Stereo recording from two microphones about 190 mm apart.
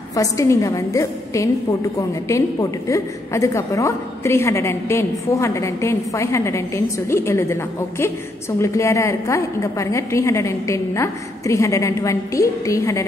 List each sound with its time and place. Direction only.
0.1 s a woman's voice: 15° left (ahead or behind)